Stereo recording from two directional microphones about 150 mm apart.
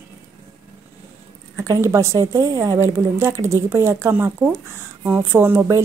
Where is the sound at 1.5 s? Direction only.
20° right (ahead or behind).